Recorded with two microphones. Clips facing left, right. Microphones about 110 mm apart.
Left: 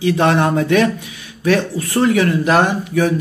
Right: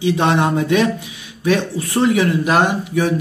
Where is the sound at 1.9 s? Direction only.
20° right (ahead or behind).